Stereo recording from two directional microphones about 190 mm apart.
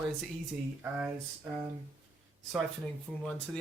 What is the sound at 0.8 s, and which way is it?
Speech, 10° right (ahead or behind).